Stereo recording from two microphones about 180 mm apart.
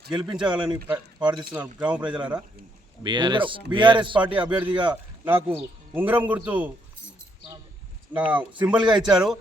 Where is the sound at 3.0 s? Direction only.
25° right (ahead or behind).